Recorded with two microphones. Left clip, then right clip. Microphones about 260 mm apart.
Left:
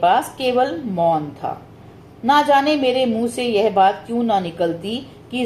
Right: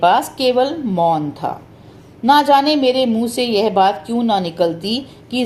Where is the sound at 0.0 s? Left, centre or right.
Right.